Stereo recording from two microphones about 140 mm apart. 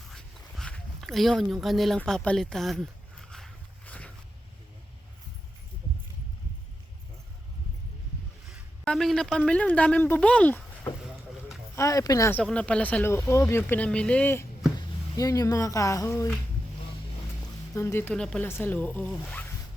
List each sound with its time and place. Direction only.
0.1 s dog: 5° left (ahead or behind)
2.0 s a sound: 5° left (ahead or behind)
8.8 s speech: 5° left (ahead or behind)
11.8 s speech: 25° left (ahead or behind)
12.3 s speech: 10° left (ahead or behind)
14.8 s speech: 25° left (ahead or behind)
17.7 s speech: 20° left (ahead or behind)
18.1 s speech: 5° left (ahead or behind)